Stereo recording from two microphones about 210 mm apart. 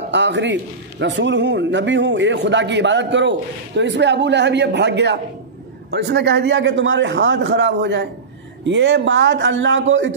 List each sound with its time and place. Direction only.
0.1 s a man's voice: 55° right (ahead or behind)